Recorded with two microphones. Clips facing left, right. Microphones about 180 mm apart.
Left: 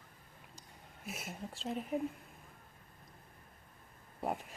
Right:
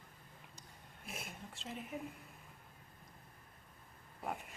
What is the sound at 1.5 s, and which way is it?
Speech, 35° left (ahead or behind).